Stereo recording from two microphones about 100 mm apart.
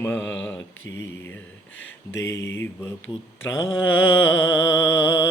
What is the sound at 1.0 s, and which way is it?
Mantra, 25° left (ahead or behind).